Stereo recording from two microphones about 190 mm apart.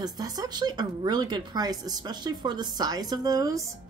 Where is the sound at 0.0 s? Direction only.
20° right (ahead or behind).